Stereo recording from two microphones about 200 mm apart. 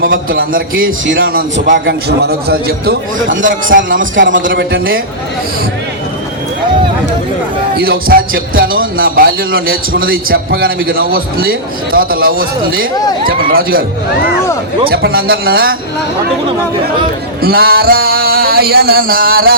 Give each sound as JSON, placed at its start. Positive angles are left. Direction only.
{"t": 0.0, "sound": "a man's voice", "side_deg": -45}
{"t": 0.8, "sound": "a man's voice", "side_deg": -70}
{"t": 4.1, "sound": "a man's voice", "side_deg": -70}
{"t": 7.8, "sound": "a man's voice", "side_deg": -50}
{"t": 14.8, "sound": "a man's voice", "side_deg": -50}
{"t": 17.4, "sound": "a man's voice", "side_deg": -50}